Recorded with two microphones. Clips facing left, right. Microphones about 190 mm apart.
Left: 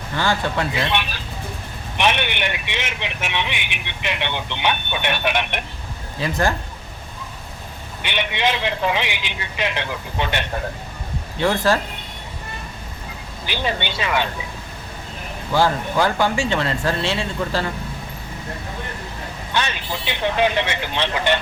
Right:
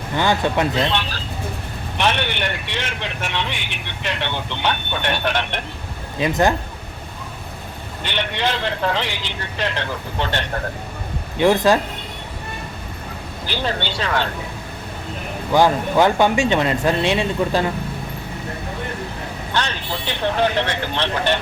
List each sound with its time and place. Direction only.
0.2 s speech: 20° right (ahead or behind)
0.7 s speech: 15° left (ahead or behind)
6.1 s speech: 20° right (ahead or behind)
8.1 s speech: 15° left (ahead or behind)
11.3 s speech: 20° right (ahead or behind)
13.5 s speech: 15° left (ahead or behind)
15.5 s speech: 20° right (ahead or behind)
19.5 s speech: 15° left (ahead or behind)